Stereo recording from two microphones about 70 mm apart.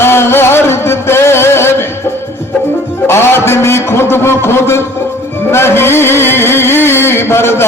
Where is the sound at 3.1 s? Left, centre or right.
Left.